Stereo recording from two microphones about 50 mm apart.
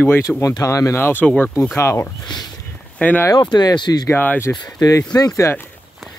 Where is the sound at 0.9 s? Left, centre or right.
Left.